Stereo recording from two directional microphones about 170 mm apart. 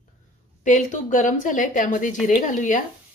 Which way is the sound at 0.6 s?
50° left (ahead or behind).